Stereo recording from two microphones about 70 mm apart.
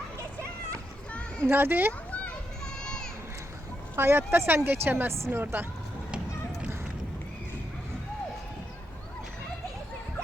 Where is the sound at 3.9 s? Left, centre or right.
Right.